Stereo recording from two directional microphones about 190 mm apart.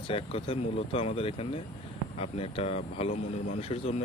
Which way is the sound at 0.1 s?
30° left (ahead or behind).